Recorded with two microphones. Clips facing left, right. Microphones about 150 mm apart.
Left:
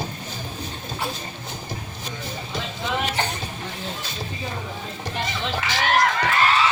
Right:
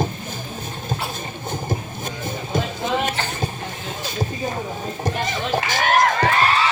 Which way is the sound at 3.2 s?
20° left (ahead or behind).